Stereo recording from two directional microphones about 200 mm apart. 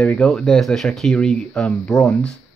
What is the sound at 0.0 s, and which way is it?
Speech, 5° left (ahead or behind).